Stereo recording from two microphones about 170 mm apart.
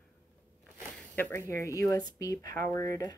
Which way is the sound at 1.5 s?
20° left (ahead or behind).